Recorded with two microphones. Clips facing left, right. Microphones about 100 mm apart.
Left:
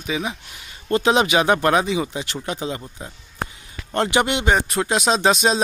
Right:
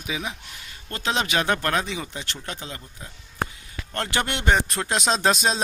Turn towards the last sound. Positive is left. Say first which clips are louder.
# left 4 dB
turn(degrees=0)  # may be behind; listen again after turning